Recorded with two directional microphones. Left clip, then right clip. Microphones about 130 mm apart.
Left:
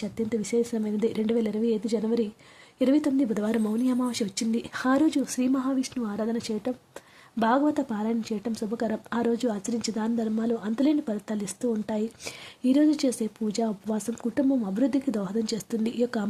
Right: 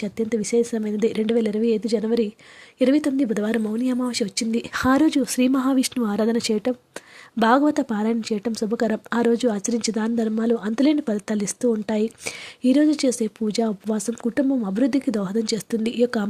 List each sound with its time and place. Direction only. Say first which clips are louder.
0.0 s speech: right 5 dB; 25° right (ahead or behind)
5.5 s speech: right 6 dB; 45° right (ahead or behind); by 16.2 s 20° right (ahead or behind)